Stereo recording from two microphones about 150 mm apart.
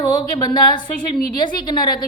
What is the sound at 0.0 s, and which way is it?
A woman's voice, 25° left (ahead or behind).